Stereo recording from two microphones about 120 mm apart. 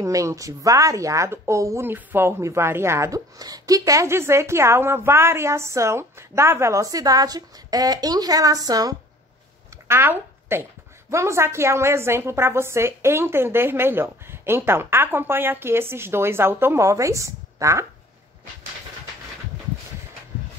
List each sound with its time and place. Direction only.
0.0 s speech: 25° right (ahead or behind)
9.8 s speech: 20° right (ahead or behind)